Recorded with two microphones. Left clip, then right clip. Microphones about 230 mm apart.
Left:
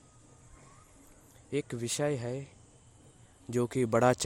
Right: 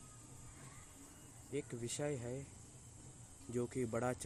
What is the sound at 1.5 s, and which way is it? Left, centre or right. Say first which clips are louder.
Speech: left 10 dB; left.